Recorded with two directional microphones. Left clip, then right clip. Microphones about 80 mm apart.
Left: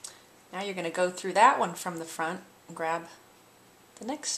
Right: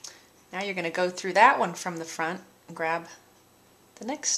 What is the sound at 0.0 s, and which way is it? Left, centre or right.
Speech, right.